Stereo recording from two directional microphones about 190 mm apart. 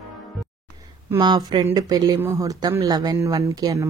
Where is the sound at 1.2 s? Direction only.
25° right (ahead or behind).